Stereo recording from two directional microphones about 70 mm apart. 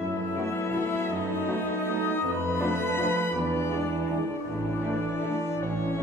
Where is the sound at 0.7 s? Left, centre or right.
Left.